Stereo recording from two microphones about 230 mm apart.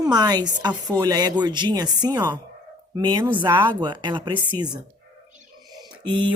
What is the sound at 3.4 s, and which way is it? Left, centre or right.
Speech, centre.